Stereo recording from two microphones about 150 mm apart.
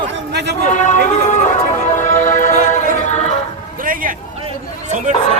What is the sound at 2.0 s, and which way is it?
Music, 55° left (ahead or behind).